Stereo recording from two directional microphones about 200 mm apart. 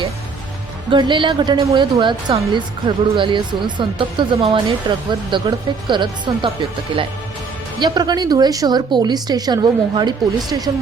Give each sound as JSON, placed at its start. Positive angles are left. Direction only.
{"t": 0.9, "sound": "a woman's voice", "side_deg": -25}